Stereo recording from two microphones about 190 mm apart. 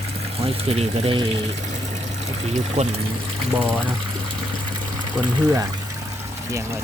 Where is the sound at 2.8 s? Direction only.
35° right (ahead or behind).